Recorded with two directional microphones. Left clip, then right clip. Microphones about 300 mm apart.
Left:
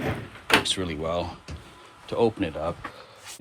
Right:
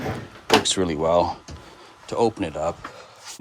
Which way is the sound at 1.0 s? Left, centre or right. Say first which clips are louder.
Right 11 dB; right.